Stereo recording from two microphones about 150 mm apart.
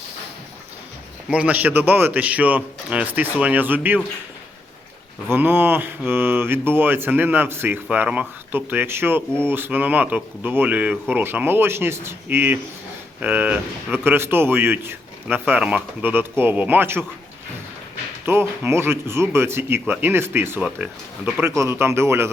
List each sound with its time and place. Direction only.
1.3 s speech: 10° right (ahead or behind)
5.3 s speech: 15° right (ahead or behind)
18.3 s speech: 15° right (ahead or behind)
21.4 s speech: 20° right (ahead or behind)